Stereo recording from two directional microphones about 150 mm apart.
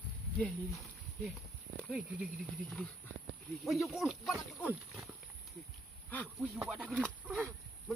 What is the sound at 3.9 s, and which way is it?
Speech, centre (ahead or behind).